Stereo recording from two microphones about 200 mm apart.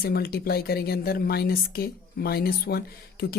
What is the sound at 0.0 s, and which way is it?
Speech, 50° left (ahead or behind).